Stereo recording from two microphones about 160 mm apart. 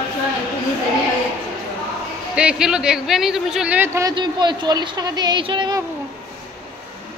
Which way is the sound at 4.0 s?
25° right (ahead or behind).